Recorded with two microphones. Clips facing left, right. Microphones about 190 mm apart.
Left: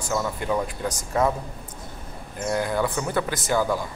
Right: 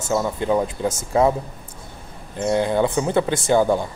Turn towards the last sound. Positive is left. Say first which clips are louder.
# right 6 dB
turn(degrees=-25)  # may be behind; listen again after turning